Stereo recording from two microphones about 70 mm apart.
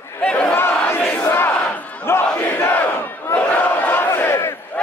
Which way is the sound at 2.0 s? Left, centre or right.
Left.